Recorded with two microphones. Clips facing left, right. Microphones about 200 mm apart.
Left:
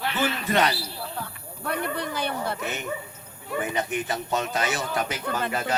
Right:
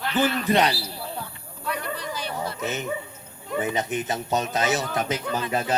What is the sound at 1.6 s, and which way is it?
Speech, 55° left (ahead or behind).